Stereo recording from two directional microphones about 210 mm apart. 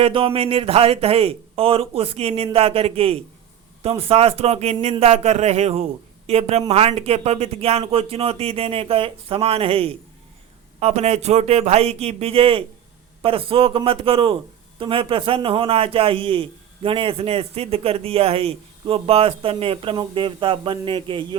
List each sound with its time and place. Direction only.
0.0 s a man's voice: 25° right (ahead or behind)